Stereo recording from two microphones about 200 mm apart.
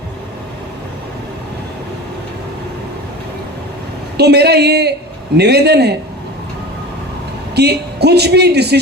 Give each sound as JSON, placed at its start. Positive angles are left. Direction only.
{"t": 4.2, "sound": "speech", "side_deg": -55}
{"t": 7.5, "sound": "speech", "side_deg": -55}